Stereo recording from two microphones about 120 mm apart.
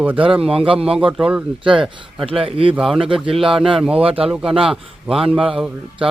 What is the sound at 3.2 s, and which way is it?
Speech, 45° right (ahead or behind).